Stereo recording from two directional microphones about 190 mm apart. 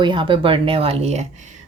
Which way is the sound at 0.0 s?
25° right (ahead or behind).